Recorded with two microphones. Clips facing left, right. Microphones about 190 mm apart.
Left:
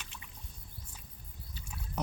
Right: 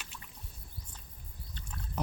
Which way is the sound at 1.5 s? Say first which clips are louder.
Right 1 dB; 10° left (ahead or behind).